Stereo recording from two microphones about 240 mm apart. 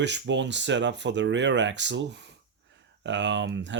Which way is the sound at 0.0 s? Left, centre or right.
Right.